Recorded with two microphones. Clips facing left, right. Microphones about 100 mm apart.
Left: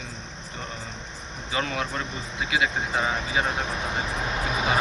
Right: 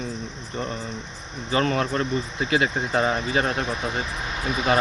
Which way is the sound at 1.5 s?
45° right (ahead or behind).